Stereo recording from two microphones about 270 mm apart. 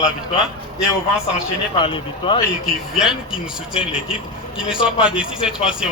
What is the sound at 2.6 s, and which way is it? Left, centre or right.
A man's voice, centre.